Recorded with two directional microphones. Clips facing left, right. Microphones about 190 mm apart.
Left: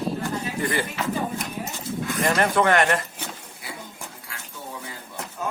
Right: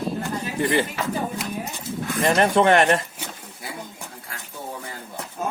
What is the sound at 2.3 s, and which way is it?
Speech, 25° right (ahead or behind).